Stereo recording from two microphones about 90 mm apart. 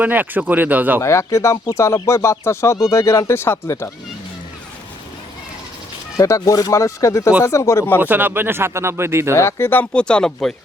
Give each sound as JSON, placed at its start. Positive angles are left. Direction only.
{"t": 0.0, "sound": "speech", "side_deg": -20}
{"t": 1.0, "sound": "speech", "side_deg": 35}
{"t": 6.1, "sound": "speech", "side_deg": 40}
{"t": 8.0, "sound": "speech", "side_deg": -20}
{"t": 9.3, "sound": "speech", "side_deg": 30}
{"t": 9.9, "sound": "speech", "side_deg": 10}